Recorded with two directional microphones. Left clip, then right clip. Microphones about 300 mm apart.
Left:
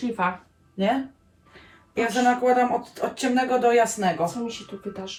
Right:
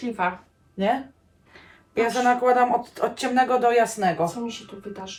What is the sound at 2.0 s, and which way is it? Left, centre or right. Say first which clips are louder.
Speech: right 1 dB; centre.